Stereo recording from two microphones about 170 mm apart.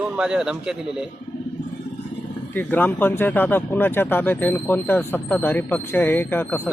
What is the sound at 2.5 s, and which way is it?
Speech, 10° left (ahead or behind).